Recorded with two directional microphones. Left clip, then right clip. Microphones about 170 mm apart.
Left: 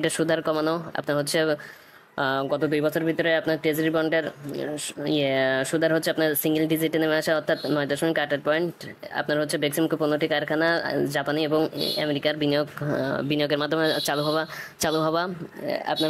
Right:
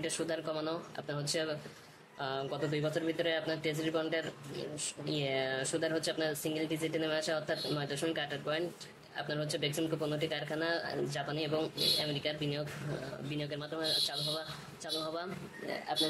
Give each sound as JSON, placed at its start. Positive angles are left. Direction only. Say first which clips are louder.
{"t": 0.0, "sound": "speech", "louder": "left 13 dB", "side_deg": 45}